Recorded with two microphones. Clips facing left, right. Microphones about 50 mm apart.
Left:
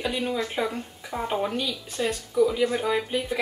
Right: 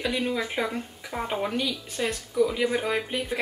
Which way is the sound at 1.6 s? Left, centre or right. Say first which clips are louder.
Left 1 dB; right.